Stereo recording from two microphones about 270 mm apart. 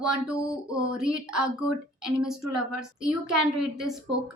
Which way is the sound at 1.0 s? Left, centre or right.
Centre.